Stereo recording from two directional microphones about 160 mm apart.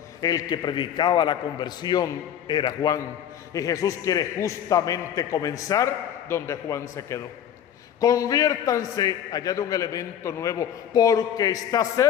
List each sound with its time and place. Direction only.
0.2 s a man's voice: 25° left (ahead or behind)